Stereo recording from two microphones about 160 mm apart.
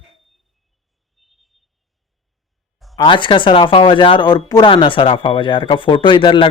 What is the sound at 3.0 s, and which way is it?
Speech, 30° left (ahead or behind).